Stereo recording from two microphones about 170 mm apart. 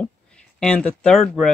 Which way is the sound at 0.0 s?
5° left (ahead or behind).